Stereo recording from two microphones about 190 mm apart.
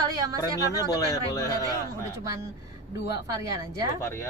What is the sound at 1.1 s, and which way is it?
Speech, 15° left (ahead or behind).